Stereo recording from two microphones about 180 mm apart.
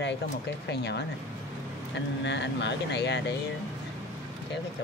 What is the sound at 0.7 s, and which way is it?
Speech, 70° left (ahead or behind).